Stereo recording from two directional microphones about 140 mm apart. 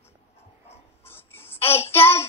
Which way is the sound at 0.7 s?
15° left (ahead or behind).